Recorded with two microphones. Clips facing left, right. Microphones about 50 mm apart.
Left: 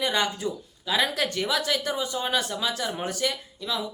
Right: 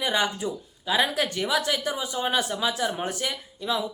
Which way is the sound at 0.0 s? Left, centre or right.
Centre.